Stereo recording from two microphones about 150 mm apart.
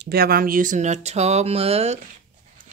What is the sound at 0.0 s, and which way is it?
Speech, 90° right.